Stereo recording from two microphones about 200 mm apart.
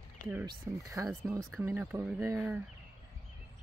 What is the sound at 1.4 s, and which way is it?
Speech, centre (ahead or behind).